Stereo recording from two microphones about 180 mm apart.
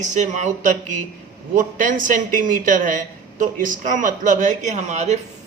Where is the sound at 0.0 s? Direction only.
40° right (ahead or behind).